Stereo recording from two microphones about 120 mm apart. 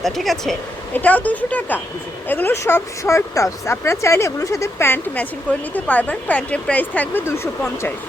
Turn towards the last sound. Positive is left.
turn(degrees=20)  # may be behind; listen again after turning